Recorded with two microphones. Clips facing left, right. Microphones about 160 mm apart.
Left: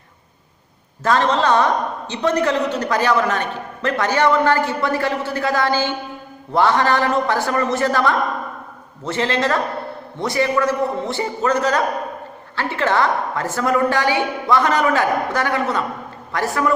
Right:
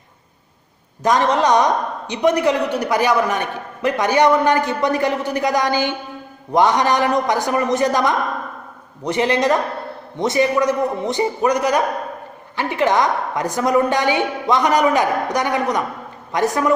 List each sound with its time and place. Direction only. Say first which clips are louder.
1.0 s a woman's voice: right 1 dB; 15° right (ahead or behind)